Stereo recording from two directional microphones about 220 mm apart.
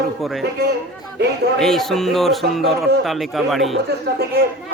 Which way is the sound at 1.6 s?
Centre (ahead or behind).